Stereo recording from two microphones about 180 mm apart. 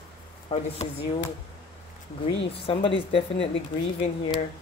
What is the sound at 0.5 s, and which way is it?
Speech, 35° left (ahead or behind).